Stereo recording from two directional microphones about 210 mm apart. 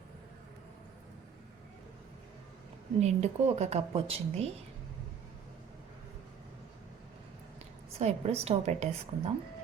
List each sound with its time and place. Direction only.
3.0 s speech: 30° right (ahead or behind)
7.9 s speech: 30° right (ahead or behind)